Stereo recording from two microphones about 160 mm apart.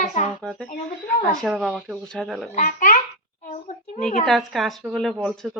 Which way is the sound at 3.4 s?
50° left (ahead or behind).